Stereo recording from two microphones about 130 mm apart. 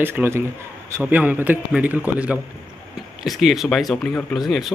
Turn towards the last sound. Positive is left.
turn(degrees=5)  # may be behind; listen again after turning